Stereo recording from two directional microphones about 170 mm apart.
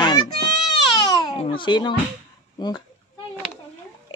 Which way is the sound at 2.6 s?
25° left (ahead or behind).